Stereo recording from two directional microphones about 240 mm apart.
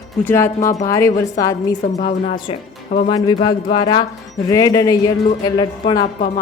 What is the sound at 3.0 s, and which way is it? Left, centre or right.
A woman's voice, centre.